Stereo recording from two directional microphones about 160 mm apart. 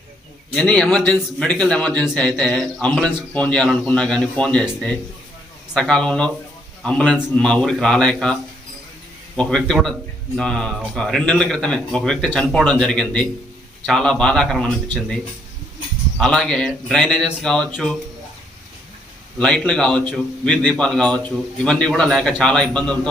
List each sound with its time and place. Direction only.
0.5 s a man's voice: 5° left (ahead or behind)
16.1 s a man's voice: 5° left (ahead or behind)
19.4 s a man's voice: 5° left (ahead or behind)